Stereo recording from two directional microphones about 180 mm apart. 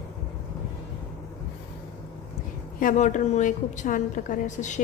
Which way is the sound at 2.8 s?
45° left (ahead or behind).